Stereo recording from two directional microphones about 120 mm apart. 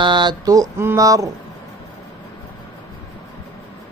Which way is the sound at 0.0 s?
40° right (ahead or behind).